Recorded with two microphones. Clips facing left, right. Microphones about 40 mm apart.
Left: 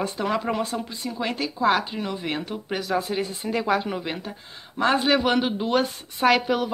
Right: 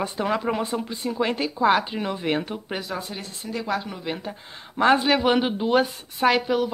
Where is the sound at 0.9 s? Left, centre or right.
Right.